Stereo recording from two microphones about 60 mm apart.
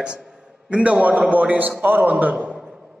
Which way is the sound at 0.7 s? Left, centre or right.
Centre.